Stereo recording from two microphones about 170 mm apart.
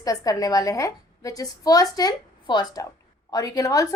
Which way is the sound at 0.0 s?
20° left (ahead or behind).